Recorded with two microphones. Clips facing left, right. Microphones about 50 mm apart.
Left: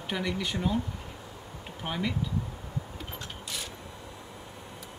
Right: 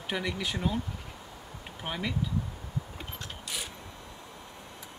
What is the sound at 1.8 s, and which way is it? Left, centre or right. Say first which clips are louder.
Speech: left 2 dB; centre.